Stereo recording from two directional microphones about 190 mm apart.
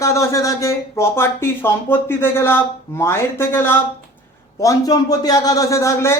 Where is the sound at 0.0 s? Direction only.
15° left (ahead or behind).